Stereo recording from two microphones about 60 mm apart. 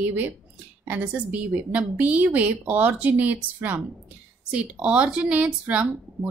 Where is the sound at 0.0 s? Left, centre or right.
Right.